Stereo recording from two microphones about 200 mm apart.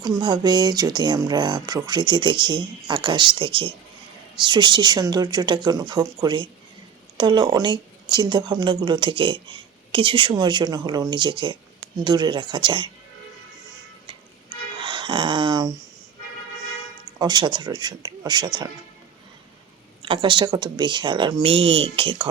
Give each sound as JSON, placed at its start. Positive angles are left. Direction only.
{"t": 0.0, "sound": "speech", "side_deg": -20}
{"t": 14.8, "sound": "a sound", "side_deg": -25}
{"t": 17.2, "sound": "speech", "side_deg": -20}
{"t": 20.0, "sound": "speech", "side_deg": -25}